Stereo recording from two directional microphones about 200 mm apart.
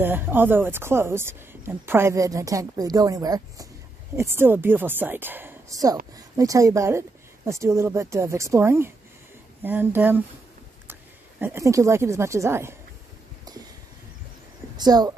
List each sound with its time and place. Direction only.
0.0 s speech: 10° right (ahead or behind)
14.8 s speech: 20° right (ahead or behind)